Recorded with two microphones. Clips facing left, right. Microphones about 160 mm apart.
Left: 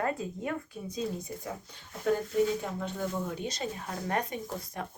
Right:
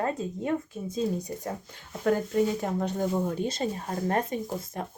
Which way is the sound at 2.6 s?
45° right (ahead or behind).